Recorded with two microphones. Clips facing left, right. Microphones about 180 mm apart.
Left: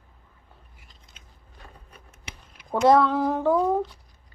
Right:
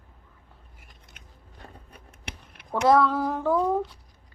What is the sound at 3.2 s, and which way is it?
Speech, 20° left (ahead or behind).